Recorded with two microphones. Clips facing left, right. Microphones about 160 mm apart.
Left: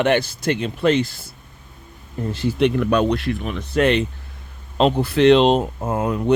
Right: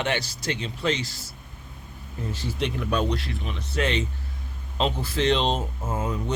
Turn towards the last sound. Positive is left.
turn(degrees=65)  # may be behind; listen again after turning